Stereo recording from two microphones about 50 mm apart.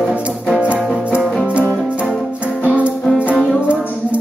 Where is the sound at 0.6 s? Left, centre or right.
Right.